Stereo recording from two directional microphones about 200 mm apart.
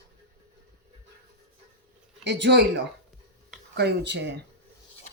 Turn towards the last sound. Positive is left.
turn(degrees=-60)  # may be behind; listen again after turning